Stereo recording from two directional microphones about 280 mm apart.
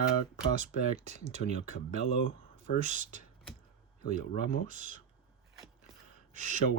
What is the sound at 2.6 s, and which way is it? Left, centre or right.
Speech, right.